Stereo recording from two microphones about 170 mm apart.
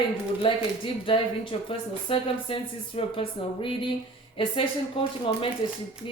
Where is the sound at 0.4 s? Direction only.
30° left (ahead or behind).